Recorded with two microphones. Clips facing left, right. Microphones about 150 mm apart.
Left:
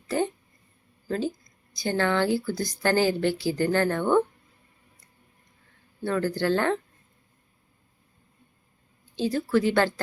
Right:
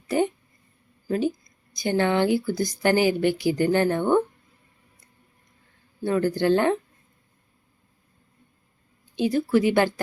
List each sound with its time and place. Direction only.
1.0 s a woman's voice: 15° right (ahead or behind)
6.0 s a woman's voice: 15° right (ahead or behind)
9.1 s a woman's voice: 15° right (ahead or behind)